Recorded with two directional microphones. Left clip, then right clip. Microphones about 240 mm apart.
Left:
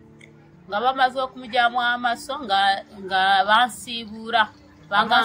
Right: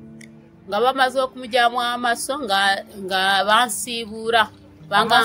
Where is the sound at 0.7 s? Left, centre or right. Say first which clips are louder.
Right 2 dB; right.